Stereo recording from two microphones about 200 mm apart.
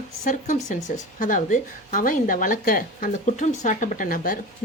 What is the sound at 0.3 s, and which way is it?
Speech, 40° left (ahead or behind).